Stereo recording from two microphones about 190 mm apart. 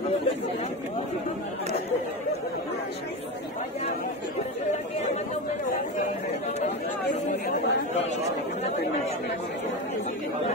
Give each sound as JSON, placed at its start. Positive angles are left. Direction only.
{"t": 7.2, "sound": "chatter", "side_deg": 40}